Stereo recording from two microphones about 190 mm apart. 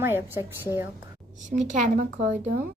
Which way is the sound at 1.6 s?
40° right (ahead or behind).